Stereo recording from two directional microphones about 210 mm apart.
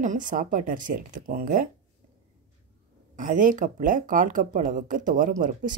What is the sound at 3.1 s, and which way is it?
A woman's voice, 40° right (ahead or behind).